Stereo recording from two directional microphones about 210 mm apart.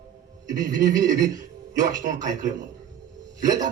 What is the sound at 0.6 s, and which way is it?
A man's voice, 35° right (ahead or behind).